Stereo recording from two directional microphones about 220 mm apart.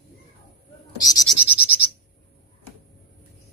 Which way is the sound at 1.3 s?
5° right (ahead or behind).